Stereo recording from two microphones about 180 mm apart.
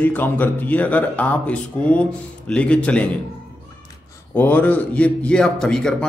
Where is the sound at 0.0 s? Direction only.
10° left (ahead or behind).